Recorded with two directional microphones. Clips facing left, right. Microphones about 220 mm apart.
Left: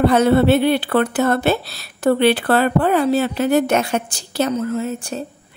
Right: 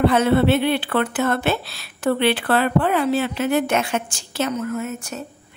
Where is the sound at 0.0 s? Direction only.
40° left (ahead or behind).